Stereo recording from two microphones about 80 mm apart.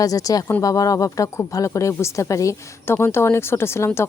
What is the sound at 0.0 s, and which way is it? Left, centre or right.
Speech, left.